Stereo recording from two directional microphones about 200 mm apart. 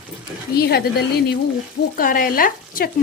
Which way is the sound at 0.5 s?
50° left (ahead or behind).